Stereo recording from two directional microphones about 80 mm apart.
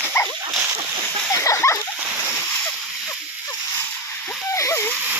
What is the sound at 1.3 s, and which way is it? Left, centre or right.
Splash, left.